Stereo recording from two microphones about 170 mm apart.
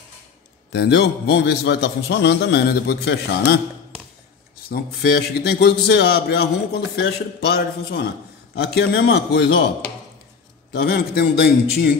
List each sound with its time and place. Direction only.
0.7 s a man's voice: 85° left
4.6 s a man's voice: 65° left (ahead or behind); by 9.7 s 85° left
10.7 s a man's voice: 65° left (ahead or behind)